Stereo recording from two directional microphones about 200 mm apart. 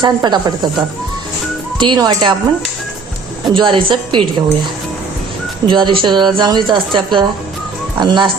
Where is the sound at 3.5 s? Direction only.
20° right (ahead or behind).